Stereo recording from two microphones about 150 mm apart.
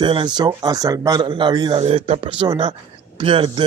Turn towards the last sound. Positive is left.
turn(degrees=-35)  # may be behind; listen again after turning